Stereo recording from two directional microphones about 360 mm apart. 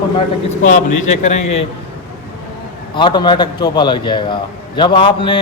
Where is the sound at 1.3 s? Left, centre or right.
Left.